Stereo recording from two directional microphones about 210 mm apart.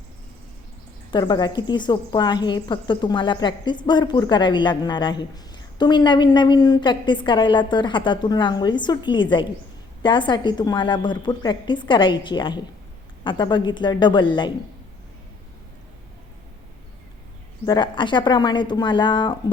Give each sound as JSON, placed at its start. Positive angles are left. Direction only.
{"t": 1.1, "sound": "speech", "side_deg": 20}
{"t": 17.7, "sound": "speech", "side_deg": 20}